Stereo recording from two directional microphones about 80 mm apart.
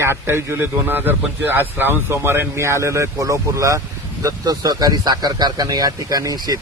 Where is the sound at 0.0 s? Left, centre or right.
Right.